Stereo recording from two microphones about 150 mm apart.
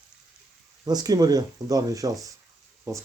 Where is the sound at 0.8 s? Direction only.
25° right (ahead or behind).